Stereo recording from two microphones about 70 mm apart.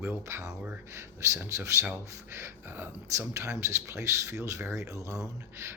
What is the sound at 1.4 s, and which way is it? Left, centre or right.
Speech, right.